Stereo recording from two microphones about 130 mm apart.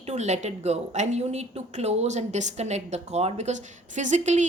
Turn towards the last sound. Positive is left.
turn(degrees=-65)  # may be behind; listen again after turning